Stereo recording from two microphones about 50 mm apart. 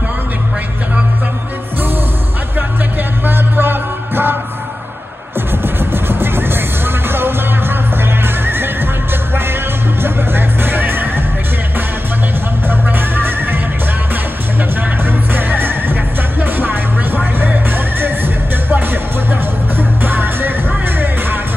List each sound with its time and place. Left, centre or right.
3.3 s music: right
5.8 s music: right
10.0 s music: right
12.6 s music: right
14.8 s music: right
19.8 s music: right